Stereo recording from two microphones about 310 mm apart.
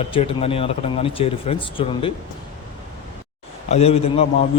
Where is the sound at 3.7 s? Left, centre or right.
Centre.